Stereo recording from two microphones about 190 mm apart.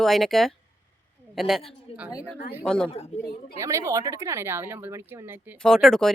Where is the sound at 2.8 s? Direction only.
35° left (ahead or behind).